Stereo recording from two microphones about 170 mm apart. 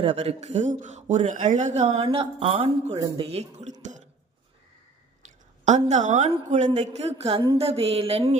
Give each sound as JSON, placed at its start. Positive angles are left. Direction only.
{"t": 0.0, "sound": "a man's voice", "side_deg": -35}
{"t": 5.9, "sound": "a woman's voice", "side_deg": -45}